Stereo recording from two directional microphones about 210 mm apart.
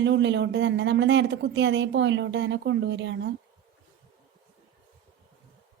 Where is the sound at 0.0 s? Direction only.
60° right (ahead or behind).